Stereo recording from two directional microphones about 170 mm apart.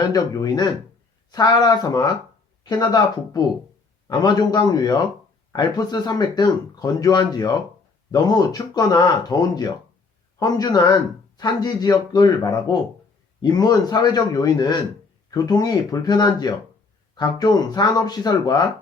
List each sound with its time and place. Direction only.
0.1 s speech: 20° left (ahead or behind)